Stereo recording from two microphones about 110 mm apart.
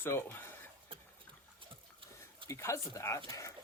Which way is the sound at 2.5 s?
25° left (ahead or behind).